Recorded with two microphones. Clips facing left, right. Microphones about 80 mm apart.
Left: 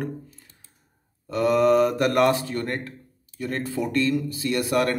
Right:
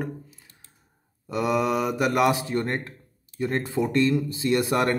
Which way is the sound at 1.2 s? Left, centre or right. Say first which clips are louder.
Left 5 dB; centre.